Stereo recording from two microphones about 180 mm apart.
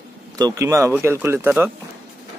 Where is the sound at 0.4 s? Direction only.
20° right (ahead or behind).